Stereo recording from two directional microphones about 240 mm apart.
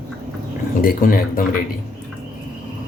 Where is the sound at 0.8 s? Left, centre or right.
Left.